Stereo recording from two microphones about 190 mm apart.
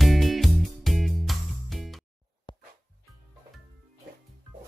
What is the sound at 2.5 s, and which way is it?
Music, 25° left (ahead or behind).